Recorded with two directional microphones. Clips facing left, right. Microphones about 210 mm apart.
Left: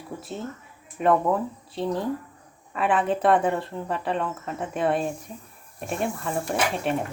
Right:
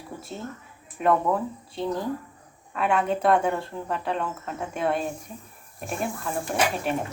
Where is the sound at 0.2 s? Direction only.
Centre (ahead or behind).